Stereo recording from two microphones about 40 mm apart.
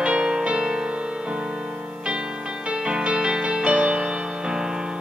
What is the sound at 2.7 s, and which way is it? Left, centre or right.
Music, right.